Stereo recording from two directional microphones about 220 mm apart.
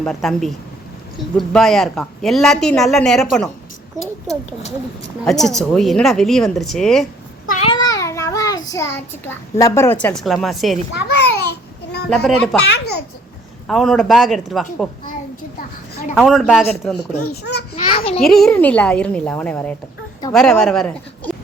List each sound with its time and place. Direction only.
0.0 s a woman's voice: centre (ahead or behind)
5.2 s a woman's voice: centre (ahead or behind)
7.4 s babbling: 35° left (ahead or behind)
7.7 s a child's voice: 15° left (ahead or behind); by 10.8 s centre (ahead or behind)
11.2 s babbling: 50° left (ahead or behind)
12.0 s a woman's voice: centre (ahead or behind)
12.6 s a child's voice: 50° left (ahead or behind)
13.7 s a woman's voice: centre (ahead or behind)
15.5 s a sound: 40° left (ahead or behind)
16.1 s a woman's voice: centre (ahead or behind)
17.7 s a sound: 25° left (ahead or behind)
18.2 s a woman's voice: centre (ahead or behind)